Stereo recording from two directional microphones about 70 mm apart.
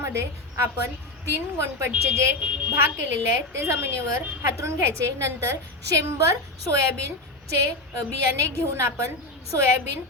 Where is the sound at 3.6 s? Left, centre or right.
Right.